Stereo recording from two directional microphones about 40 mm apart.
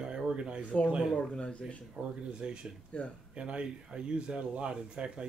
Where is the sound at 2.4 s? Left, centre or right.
Right.